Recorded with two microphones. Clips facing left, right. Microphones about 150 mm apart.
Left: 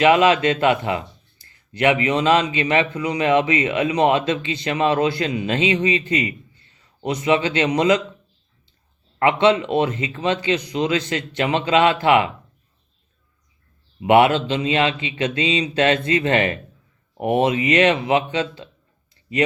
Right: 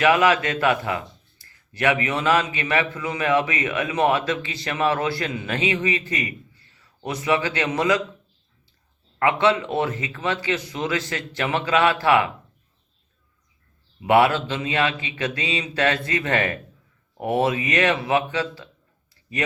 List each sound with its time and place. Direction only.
0.0 s a man's voice: 20° left (ahead or behind)
9.1 s speech: 20° left (ahead or behind)
14.1 s speech: 20° left (ahead or behind)